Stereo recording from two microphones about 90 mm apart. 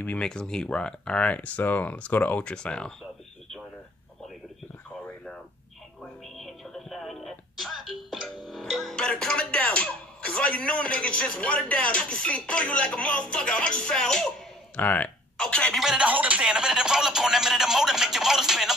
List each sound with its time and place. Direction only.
0.0 s speech: 15° left (ahead or behind)
6.3 s music: centre (ahead or behind)
14.8 s speech: 20° left (ahead or behind)
15.8 s speech: 5° right (ahead or behind)
16.1 s speech: 15° right (ahead or behind)